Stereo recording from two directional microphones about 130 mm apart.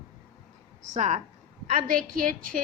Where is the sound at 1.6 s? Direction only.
80° right.